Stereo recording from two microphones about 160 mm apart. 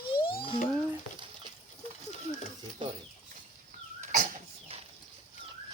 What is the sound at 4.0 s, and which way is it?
Cough, 55° right (ahead or behind).